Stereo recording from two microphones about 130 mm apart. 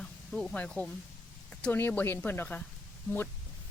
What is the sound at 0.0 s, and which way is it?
Speech, 5° left (ahead or behind).